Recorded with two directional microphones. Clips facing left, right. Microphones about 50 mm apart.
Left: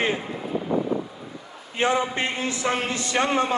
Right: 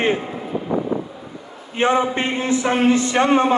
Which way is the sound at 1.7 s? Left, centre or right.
Right.